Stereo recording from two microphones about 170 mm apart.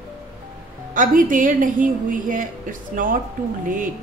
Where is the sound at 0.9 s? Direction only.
50° right (ahead or behind).